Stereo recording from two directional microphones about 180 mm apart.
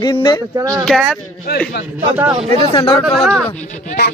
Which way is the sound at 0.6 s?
20° right (ahead or behind).